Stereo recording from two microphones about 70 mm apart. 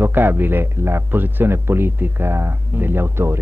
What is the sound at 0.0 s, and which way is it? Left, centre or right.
A man's voice, right.